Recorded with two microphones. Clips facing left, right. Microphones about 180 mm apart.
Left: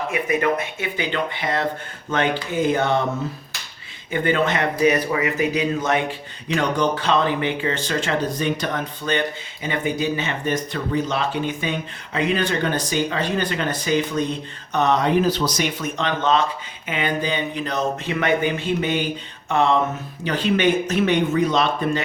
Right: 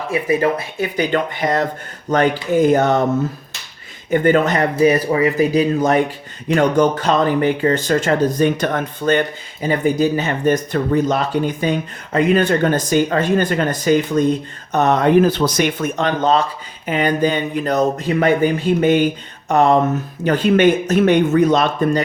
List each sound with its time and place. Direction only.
0.1 s speech: 30° right (ahead or behind)
4.1 s speech: 45° right (ahead or behind)